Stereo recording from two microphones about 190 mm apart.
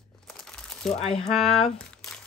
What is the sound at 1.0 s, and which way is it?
Speech, 30° left (ahead or behind).